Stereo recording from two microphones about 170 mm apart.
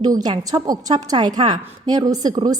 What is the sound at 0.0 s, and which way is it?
A woman's voice, 25° right (ahead or behind).